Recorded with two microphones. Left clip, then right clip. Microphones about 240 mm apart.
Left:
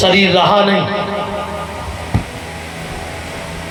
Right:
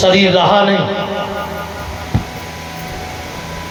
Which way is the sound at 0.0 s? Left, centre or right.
Left.